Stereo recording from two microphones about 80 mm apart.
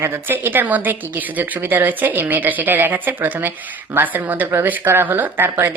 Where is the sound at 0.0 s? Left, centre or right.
Right.